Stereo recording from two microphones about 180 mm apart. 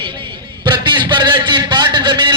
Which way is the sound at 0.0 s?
25° right (ahead or behind).